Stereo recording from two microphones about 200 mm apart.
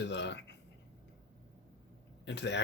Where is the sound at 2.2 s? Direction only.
60° left (ahead or behind).